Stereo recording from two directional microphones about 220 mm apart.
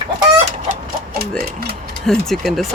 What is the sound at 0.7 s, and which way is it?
Chicken, 45° right (ahead or behind).